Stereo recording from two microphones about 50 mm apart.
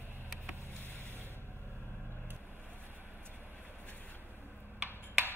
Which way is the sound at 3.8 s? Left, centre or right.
Left.